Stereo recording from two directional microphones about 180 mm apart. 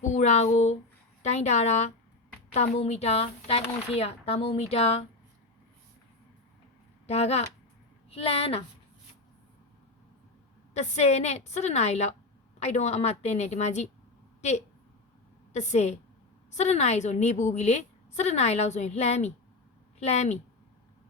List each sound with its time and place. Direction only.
0.1 s a woman's voice: 40° left (ahead or behind)
7.1 s a woman's voice: 35° left (ahead or behind)
10.8 s a woman's voice: 40° left (ahead or behind)
15.5 s a woman's voice: 40° left (ahead or behind)